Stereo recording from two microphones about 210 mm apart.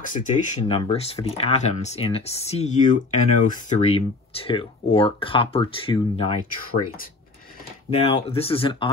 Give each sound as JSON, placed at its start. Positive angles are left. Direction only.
{"t": 0.0, "sound": "speech", "side_deg": 40}
{"t": 8.0, "sound": "speech", "side_deg": 30}